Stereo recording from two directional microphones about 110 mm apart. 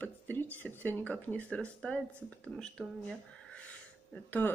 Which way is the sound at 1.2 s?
15° left (ahead or behind).